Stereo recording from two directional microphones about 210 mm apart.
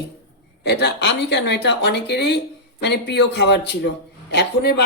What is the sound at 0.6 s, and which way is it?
Speech, 50° left (ahead or behind).